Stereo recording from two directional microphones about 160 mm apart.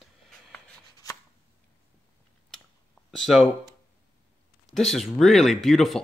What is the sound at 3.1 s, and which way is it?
Speech, centre (ahead or behind).